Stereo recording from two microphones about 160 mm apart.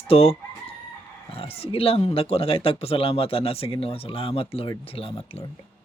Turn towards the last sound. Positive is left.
turn(degrees=35)  # may be behind; listen again after turning